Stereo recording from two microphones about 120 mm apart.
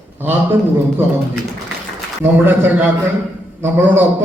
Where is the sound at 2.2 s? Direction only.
15° right (ahead or behind).